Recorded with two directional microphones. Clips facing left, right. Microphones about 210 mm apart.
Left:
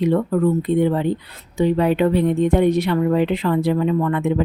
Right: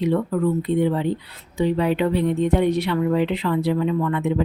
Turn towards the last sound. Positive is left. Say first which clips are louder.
# left 3 dB
turn(degrees=50)  # may be behind; listen again after turning